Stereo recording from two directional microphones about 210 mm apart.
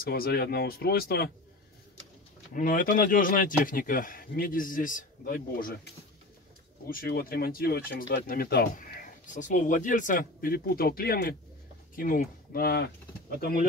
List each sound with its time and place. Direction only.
0.0 s speech: 45° left (ahead or behind)
2.5 s speech: 40° left (ahead or behind)
6.9 s speech: 45° left (ahead or behind)